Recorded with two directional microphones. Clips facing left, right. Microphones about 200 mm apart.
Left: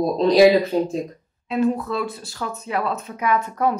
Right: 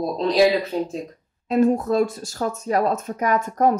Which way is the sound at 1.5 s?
45° right (ahead or behind).